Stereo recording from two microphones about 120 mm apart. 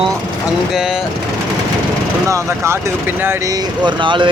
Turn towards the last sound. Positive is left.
turn(degrees=-40)  # may be behind; listen again after turning